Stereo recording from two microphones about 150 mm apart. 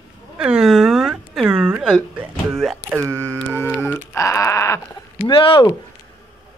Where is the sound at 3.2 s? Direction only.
15° left (ahead or behind).